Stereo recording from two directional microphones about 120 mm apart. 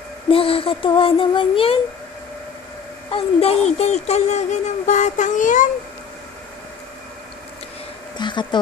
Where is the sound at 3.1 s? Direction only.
55° left (ahead or behind); by 5.7 s 90° left.